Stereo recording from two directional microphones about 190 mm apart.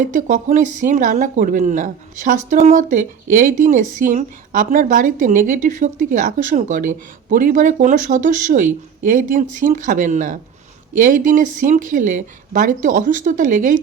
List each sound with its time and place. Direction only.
0.0 s a woman's voice: 40° right (ahead or behind)